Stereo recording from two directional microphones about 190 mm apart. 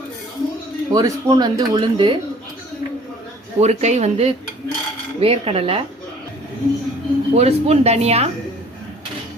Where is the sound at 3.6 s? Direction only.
35° right (ahead or behind).